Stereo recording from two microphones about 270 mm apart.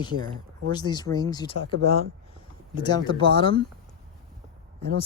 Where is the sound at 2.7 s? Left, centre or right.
Centre.